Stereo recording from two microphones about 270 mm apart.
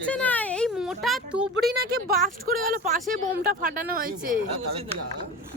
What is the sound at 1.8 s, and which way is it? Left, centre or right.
Speech, right.